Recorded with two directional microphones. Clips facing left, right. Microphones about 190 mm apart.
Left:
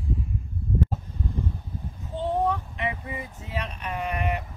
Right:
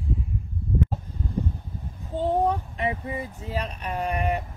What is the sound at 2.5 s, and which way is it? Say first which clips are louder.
Speech: right 2 dB; 35° right (ahead or behind).